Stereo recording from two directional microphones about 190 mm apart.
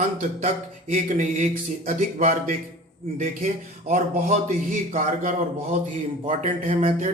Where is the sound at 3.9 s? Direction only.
40° right (ahead or behind).